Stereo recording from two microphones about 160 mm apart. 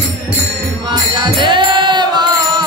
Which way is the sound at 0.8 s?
30° right (ahead or behind).